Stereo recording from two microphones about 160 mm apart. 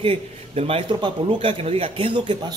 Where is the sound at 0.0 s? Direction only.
35° right (ahead or behind).